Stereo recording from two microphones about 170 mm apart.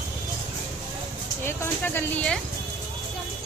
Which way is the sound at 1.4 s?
15° left (ahead or behind).